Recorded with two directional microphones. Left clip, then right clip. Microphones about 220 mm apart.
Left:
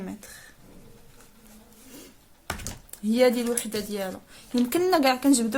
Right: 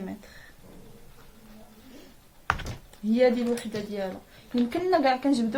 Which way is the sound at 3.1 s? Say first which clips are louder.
Left 1 dB; 50° left (ahead or behind).